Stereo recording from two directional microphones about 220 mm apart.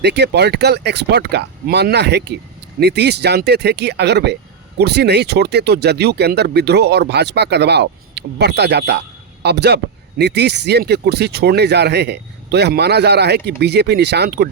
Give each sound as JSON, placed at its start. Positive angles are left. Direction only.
{"t": 0.0, "sound": "speech", "side_deg": -50}